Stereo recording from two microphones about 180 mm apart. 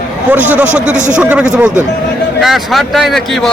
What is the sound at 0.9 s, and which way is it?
Speech, 45° right (ahead or behind).